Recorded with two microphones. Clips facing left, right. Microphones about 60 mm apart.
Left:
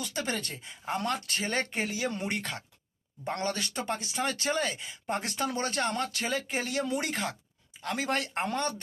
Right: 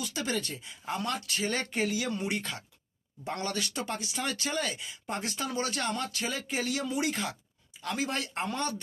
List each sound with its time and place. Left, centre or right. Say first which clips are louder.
0.0 s speech: even; left
2.4 s speech: left 1 dB; left
3.2 s speech: left 1 dB; left
5.2 s speech: right 2 dB; left
6.8 s speech: even; left
8.0 s speech: left 4 dB; left